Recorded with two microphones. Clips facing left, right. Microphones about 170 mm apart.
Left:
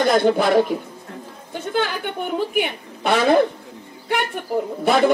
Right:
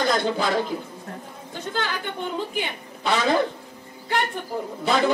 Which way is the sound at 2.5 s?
60° left (ahead or behind).